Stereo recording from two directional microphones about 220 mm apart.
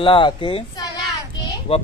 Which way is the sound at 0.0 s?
25° left (ahead or behind).